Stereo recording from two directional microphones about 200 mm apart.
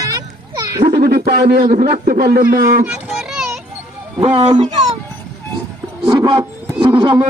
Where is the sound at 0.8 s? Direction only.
50° right (ahead or behind).